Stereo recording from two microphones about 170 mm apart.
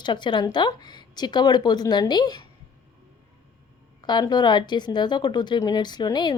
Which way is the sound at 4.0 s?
25° left (ahead or behind).